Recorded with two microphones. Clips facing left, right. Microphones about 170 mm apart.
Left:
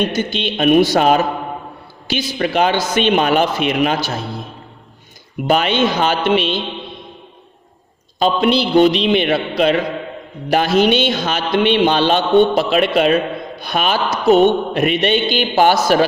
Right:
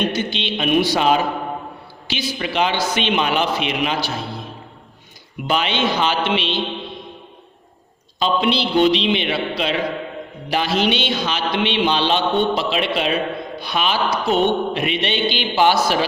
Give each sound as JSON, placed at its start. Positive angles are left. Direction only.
{"t": 0.1, "sound": "a man's voice", "side_deg": 45}
{"t": 5.5, "sound": "a man's voice", "side_deg": 50}
{"t": 8.2, "sound": "a man's voice", "side_deg": 45}